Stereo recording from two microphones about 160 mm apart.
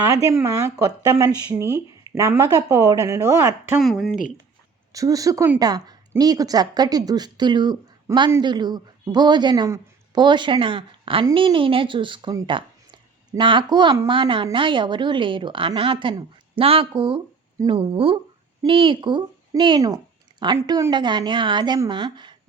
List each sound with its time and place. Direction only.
0.1 s a woman's voice: 20° right (ahead or behind)
3.8 s speech: centre (ahead or behind)
4.9 s a woman's voice: 20° right (ahead or behind)